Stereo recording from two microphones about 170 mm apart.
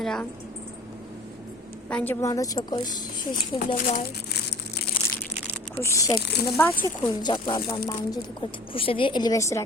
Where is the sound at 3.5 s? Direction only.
50° left (ahead or behind).